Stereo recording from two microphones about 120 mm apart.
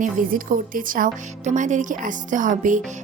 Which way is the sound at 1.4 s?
90° right.